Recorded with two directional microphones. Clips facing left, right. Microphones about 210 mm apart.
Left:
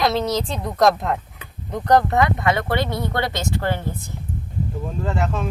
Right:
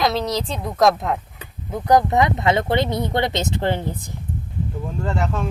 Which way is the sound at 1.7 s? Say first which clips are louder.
Right 1 dB; 10° right (ahead or behind).